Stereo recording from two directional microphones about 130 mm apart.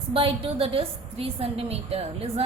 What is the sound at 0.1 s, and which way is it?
A woman's voice, 45° right (ahead or behind).